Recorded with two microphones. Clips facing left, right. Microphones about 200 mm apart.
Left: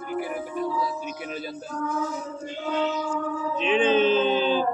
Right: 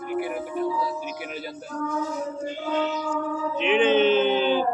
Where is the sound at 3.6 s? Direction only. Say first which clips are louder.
Right 1 dB; 20° right (ahead or behind).